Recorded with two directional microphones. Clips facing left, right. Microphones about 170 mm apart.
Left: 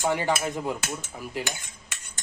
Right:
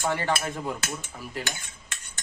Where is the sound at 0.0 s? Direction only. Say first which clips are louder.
Left 2 dB; 15° left (ahead or behind).